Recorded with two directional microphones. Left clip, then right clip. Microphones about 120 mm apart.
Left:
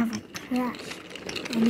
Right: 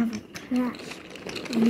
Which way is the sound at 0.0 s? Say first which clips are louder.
Even; 30° left (ahead or behind).